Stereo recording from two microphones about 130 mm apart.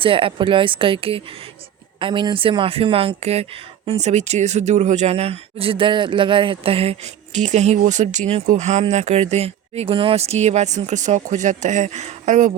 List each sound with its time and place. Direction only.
0.0 s speech: 45° right (ahead or behind); by 12.5 s 75° right (ahead or behind)